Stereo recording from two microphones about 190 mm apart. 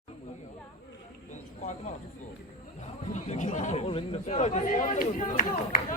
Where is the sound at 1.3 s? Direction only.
40° left (ahead or behind).